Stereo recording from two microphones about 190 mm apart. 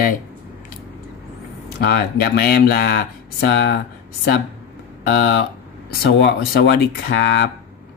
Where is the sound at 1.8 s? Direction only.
55° left (ahead or behind).